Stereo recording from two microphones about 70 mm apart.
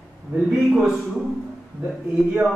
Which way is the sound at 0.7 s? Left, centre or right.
Centre.